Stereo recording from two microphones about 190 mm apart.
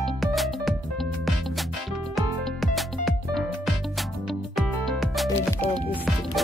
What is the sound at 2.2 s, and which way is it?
Music, centre (ahead or behind).